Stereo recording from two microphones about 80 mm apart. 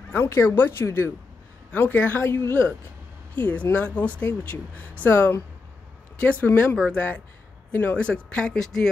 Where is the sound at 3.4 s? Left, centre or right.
Centre.